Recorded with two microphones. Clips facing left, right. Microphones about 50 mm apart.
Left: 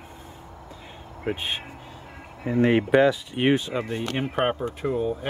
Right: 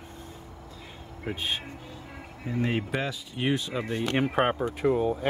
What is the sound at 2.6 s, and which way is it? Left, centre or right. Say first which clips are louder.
Speech: left 11 dB; left.